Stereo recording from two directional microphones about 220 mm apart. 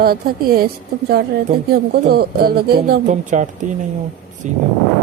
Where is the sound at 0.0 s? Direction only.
45° right (ahead or behind).